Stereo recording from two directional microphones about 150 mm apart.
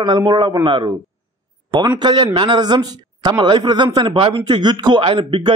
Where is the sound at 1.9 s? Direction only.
30° right (ahead or behind).